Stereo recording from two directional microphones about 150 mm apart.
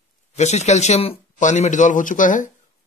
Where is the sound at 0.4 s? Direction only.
50° left (ahead or behind).